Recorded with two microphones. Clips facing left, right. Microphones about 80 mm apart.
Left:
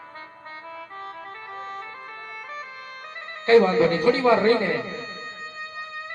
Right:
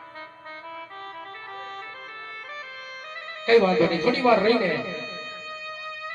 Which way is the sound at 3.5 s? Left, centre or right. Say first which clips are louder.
Left 2 dB; left.